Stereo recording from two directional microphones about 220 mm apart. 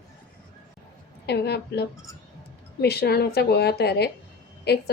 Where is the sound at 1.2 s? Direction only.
50° left (ahead or behind).